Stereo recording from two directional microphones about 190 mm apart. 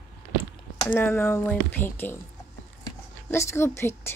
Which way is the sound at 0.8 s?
10° left (ahead or behind).